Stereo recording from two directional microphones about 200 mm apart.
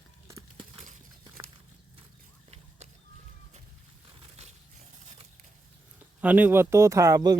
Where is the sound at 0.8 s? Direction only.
30° right (ahead or behind).